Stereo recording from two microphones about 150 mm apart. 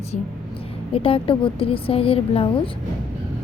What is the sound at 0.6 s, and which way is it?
A woman's voice, 40° left (ahead or behind).